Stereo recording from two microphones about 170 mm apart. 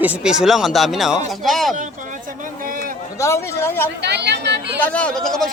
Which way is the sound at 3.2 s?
15° left (ahead or behind).